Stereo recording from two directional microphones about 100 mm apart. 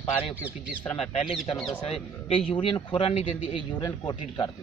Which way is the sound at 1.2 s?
5° right (ahead or behind).